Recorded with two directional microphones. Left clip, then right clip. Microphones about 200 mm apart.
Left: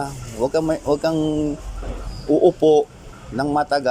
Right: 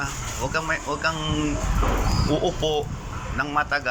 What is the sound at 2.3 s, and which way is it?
A man's voice, 20° left (ahead or behind).